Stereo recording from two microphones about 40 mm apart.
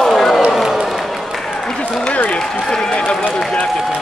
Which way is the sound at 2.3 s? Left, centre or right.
Centre.